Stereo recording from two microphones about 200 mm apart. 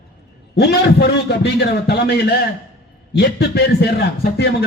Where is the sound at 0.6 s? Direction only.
55° left (ahead or behind).